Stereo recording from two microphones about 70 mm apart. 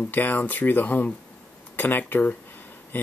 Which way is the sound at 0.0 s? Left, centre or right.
Left.